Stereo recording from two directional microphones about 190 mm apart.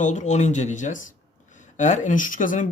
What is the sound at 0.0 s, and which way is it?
Speech, 40° left (ahead or behind).